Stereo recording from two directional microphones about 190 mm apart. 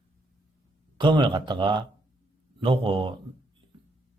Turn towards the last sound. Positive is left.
turn(degrees=-25)  # may be behind; listen again after turning